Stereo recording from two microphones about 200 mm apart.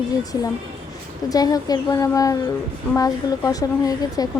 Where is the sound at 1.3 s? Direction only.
20° left (ahead or behind).